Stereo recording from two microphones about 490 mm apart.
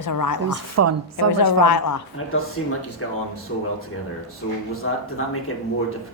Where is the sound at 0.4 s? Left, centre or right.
Right.